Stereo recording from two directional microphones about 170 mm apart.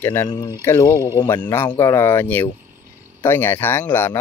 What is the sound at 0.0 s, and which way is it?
Speech, 15° left (ahead or behind).